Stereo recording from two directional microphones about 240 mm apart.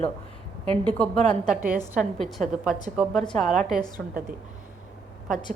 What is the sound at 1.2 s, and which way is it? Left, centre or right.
Speech, right.